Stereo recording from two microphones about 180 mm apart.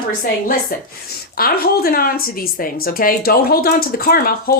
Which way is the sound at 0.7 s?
50° left (ahead or behind).